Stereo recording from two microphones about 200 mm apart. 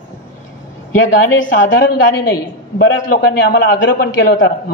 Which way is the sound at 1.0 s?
75° left (ahead or behind).